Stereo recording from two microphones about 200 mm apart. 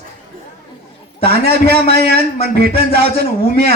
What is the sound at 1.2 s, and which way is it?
Speech, 55° right (ahead or behind).